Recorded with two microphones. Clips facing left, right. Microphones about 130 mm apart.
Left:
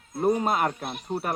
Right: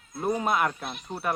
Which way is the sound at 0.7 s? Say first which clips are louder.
Left 3 dB; 50° left (ahead or behind).